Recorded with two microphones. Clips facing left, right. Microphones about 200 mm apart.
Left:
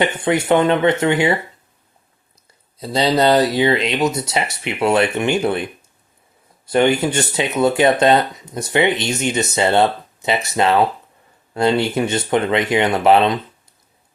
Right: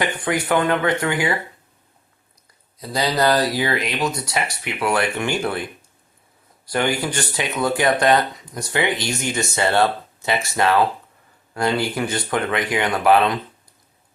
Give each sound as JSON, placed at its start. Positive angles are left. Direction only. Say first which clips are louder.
{"t": 0.0, "sound": "speech", "louder": "left 5 dB", "side_deg": 25}
{"t": 2.7, "sound": "speech", "louder": "left 5 dB", "side_deg": 25}
{"t": 6.7, "sound": "speech", "louder": "left 6 dB", "side_deg": 25}